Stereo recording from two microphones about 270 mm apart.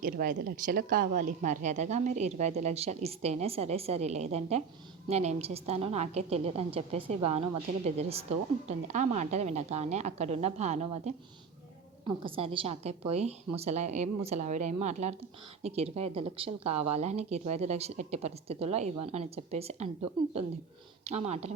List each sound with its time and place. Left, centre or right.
0.0 s a woman's voice: right
21.0 s a woman's voice: right